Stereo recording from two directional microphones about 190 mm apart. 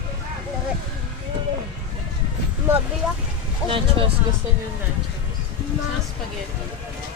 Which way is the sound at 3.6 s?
30° right (ahead or behind).